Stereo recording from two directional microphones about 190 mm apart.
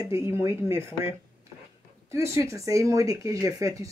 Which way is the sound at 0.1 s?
15° right (ahead or behind).